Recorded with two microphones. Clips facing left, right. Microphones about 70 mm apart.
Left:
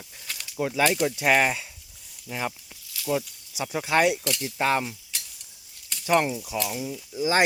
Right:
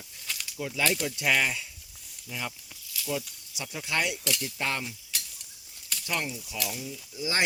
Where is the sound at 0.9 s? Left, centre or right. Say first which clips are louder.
Left 6 dB; left.